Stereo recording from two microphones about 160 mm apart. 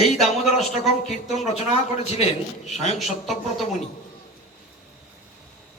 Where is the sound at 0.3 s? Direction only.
45° left (ahead or behind).